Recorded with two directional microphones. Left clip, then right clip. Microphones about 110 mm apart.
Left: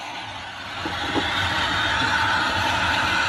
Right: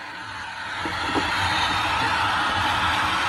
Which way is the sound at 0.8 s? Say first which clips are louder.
Even; 45° right (ahead or behind).